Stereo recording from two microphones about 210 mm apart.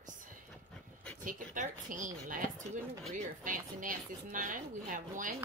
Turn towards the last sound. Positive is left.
turn(degrees=-40)  # may be behind; listen again after turning